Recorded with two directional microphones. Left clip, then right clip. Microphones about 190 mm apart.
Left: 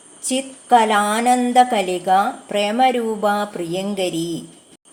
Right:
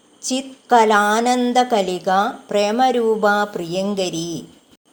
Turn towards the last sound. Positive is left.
turn(degrees=-25)  # may be behind; listen again after turning